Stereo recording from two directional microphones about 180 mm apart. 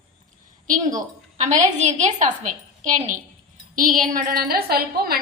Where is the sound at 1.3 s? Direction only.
40° right (ahead or behind).